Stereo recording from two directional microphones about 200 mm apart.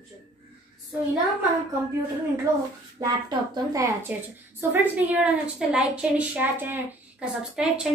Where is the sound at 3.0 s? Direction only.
15° right (ahead or behind).